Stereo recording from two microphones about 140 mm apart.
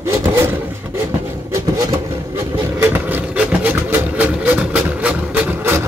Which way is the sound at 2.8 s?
10° right (ahead or behind).